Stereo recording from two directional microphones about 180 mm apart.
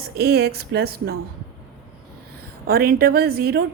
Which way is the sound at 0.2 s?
65° right (ahead or behind).